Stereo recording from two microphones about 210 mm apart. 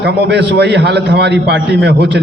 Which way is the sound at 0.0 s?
55° right (ahead or behind).